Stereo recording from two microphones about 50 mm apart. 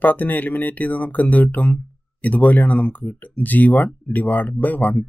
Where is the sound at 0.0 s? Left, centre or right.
Left.